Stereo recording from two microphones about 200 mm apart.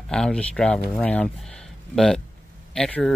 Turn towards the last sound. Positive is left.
turn(degrees=5)  # may be behind; listen again after turning